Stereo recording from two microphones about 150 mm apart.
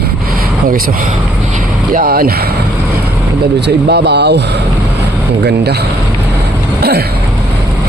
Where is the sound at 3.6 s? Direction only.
90° right.